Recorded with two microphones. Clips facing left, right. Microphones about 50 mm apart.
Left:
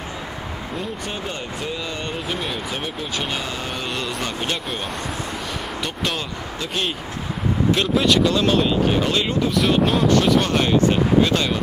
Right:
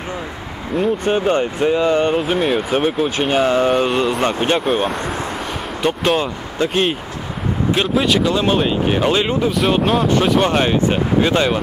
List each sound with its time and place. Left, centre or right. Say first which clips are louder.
1.0 s speech: right 12 dB; right
2.2 s speech: right 9 dB; centre
3.4 s speech: right 14 dB; right
3.7 s speech: right 10 dB; right
5.8 s speech: right 11 dB; centre
7.7 s speech: right 2 dB; centre
9.6 s speech: right 1 dB; centre
10.0 s speech: right 2 dB; centre